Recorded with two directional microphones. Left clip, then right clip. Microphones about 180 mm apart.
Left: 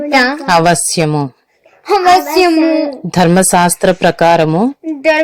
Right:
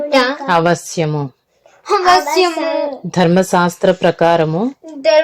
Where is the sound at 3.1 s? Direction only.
15° left (ahead or behind).